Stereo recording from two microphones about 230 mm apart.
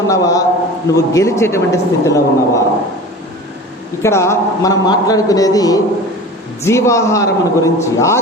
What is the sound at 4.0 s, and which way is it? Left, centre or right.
A man's voice, centre.